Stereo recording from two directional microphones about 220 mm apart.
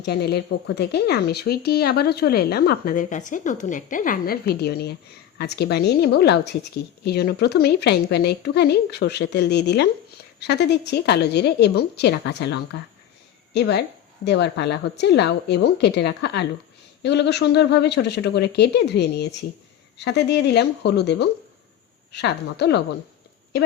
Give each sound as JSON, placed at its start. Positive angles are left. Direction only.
{"t": 0.0, "sound": "speech", "side_deg": 50}